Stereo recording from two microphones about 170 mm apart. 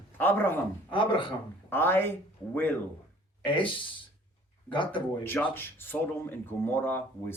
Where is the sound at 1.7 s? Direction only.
15° left (ahead or behind).